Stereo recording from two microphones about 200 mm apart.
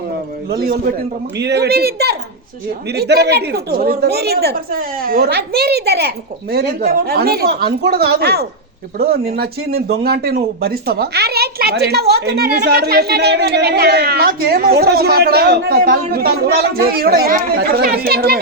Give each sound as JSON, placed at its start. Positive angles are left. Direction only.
{"t": 0.5, "sound": "speech", "side_deg": -50}